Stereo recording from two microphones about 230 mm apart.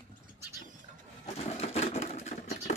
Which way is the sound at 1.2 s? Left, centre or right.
Left.